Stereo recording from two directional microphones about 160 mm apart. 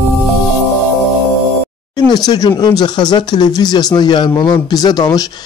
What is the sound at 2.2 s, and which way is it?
Speech, 25° left (ahead or behind).